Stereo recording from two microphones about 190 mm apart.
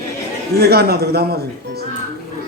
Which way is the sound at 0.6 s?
55° right (ahead or behind).